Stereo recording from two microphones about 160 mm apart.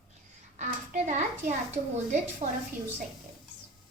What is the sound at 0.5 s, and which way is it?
A woman's voice, 50° right (ahead or behind).